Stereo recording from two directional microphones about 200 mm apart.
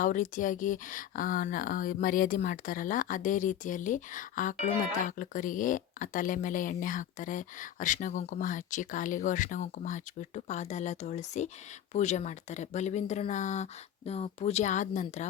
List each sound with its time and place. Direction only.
0.0 s speech: 40° left (ahead or behind)